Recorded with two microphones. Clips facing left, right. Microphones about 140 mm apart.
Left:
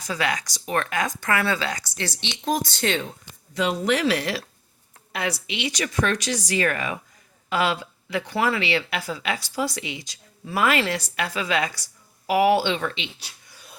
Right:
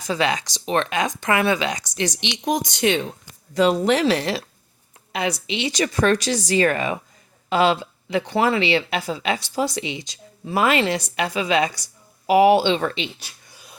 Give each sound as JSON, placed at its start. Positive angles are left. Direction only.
{"t": 0.1, "sound": "speech", "side_deg": -25}
{"t": 3.5, "sound": "speech", "side_deg": -35}
{"t": 12.8, "sound": "speech", "side_deg": -40}